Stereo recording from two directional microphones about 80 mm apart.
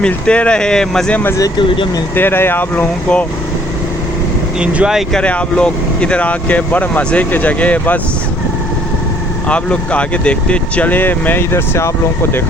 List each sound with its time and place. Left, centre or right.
0.0 s speech: centre
1.5 s speech: left
2.1 s speech: left
4.6 s speech: centre
5.1 s speech: centre
9.5 s speech: centre; by 11.9 s left